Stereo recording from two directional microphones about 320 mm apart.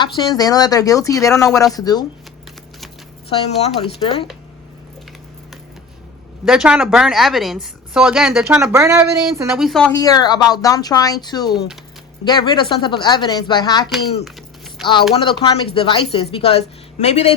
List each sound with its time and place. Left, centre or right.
0.0 s speech: centre
3.2 s speech: centre
6.4 s a woman's voice: centre
14.3 s a sound: centre
15.2 s speech: centre